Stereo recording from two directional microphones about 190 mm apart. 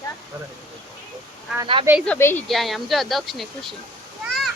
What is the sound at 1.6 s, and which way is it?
Speech, 30° right (ahead or behind).